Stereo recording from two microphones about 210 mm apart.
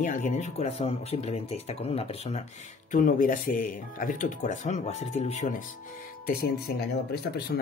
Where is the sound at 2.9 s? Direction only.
40° left (ahead or behind).